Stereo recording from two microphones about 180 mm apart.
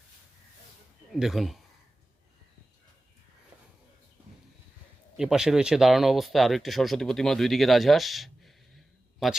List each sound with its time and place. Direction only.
1.1 s speech: centre (ahead or behind)
5.1 s speech: 5° right (ahead or behind)